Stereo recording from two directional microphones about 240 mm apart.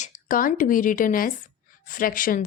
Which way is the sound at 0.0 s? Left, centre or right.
Left.